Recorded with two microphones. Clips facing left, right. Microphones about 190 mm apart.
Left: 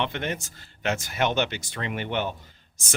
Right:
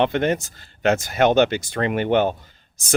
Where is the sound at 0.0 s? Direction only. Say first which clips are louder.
Right 10 dB; 40° right (ahead or behind).